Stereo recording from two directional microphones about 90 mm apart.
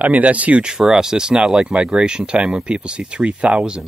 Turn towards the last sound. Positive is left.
turn(degrees=-10)  # may be behind; listen again after turning